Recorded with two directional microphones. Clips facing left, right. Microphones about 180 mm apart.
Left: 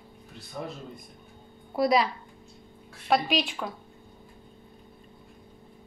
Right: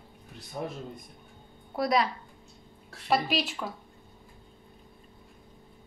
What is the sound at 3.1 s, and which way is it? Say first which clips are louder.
Speech: left 2 dB; centre (ahead or behind).